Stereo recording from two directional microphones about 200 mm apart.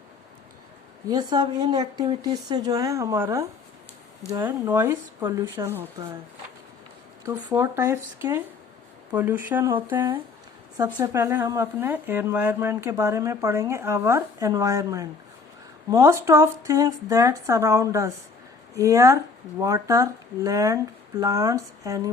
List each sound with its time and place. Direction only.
1.0 s speech: 20° right (ahead or behind)
4.4 s speech: 10° right (ahead or behind)
7.3 s speech: 15° right (ahead or behind)
10.8 s speech: 15° right (ahead or behind)